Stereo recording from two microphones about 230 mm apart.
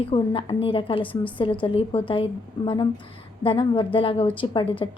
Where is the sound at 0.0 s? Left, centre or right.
Left.